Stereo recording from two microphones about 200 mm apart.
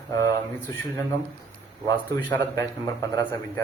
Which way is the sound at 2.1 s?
15° left (ahead or behind).